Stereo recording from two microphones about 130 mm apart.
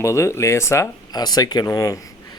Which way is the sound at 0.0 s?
20° left (ahead or behind).